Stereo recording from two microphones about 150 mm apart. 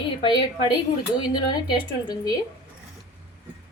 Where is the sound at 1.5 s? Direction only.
30° left (ahead or behind).